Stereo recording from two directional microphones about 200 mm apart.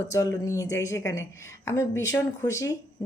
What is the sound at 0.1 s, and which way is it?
A woman's voice, 15° left (ahead or behind).